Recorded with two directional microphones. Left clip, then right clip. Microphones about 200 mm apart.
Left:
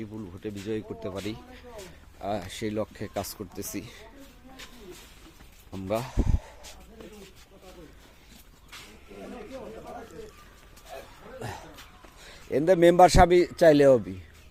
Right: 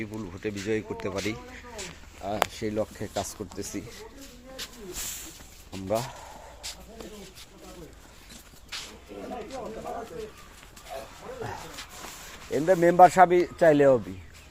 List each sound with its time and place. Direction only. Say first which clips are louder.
0.1 s speech: right 4 dB; 15° left (ahead or behind)
5.7 s speech: right 1 dB; 30° left (ahead or behind)
12.5 s speech: left 2 dB; 55° left (ahead or behind)